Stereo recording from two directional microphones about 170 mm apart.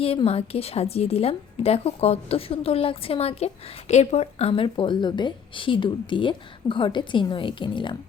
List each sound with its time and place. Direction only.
0.0 s a woman's voice: 35° left (ahead or behind)